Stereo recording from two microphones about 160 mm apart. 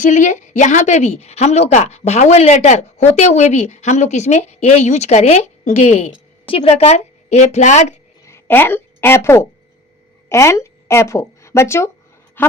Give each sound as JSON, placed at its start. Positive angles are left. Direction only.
{"t": 0.0, "sound": "a woman's voice", "side_deg": 50}
{"t": 8.3, "sound": "a woman's voice", "side_deg": 15}